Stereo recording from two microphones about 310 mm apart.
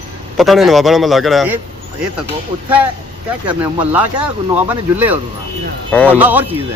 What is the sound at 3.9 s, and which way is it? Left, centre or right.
Speech, centre.